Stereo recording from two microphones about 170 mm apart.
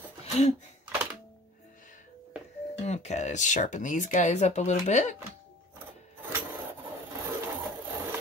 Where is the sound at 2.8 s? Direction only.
40° left (ahead or behind).